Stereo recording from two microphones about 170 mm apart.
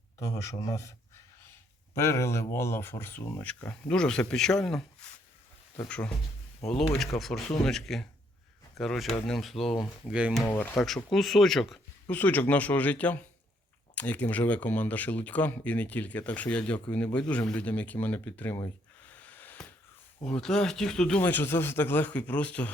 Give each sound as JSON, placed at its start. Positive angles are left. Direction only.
{"t": 0.2, "sound": "speech", "side_deg": 20}
{"t": 2.0, "sound": "speech", "side_deg": 15}
{"t": 7.2, "sound": "speech", "side_deg": 0}
{"t": 10.4, "sound": "speech", "side_deg": 10}
{"t": 19.0, "sound": "a sound", "side_deg": 10}
{"t": 20.2, "sound": "speech", "side_deg": 5}